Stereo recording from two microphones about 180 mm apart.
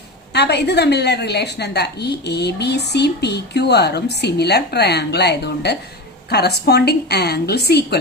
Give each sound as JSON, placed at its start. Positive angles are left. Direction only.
{"t": 0.3, "sound": "a woman's voice", "side_deg": 65}